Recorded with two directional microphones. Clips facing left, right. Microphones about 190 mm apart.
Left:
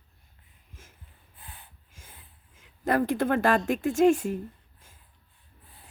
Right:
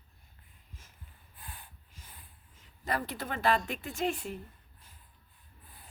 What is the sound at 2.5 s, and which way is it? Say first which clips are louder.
Speech: left 9 dB; 50° left (ahead or behind).